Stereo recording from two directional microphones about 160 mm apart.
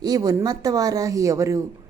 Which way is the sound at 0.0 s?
25° right (ahead or behind).